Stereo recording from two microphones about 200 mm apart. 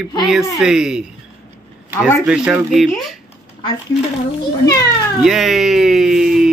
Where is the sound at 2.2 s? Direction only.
5° right (ahead or behind).